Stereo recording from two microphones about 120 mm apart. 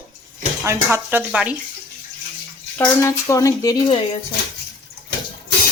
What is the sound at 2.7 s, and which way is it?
Speech, 25° left (ahead or behind).